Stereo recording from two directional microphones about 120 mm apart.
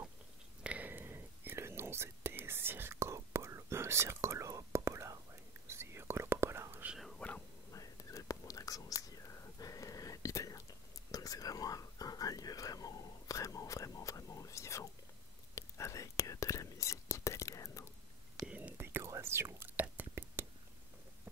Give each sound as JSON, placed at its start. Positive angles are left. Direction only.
{"t": 0.7, "sound": "whispering", "side_deg": -15}
{"t": 6.9, "sound": "whispering", "side_deg": 0}
{"t": 7.7, "sound": "whispering", "side_deg": 30}
{"t": 18.5, "sound": "whispering", "side_deg": -15}